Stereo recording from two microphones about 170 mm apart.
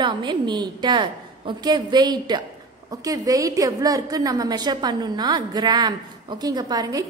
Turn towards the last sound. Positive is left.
turn(degrees=-20)  # may be behind; listen again after turning